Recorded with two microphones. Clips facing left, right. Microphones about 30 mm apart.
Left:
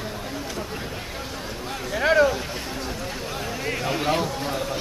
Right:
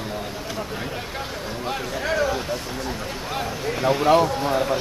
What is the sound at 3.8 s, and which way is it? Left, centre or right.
Speech, centre.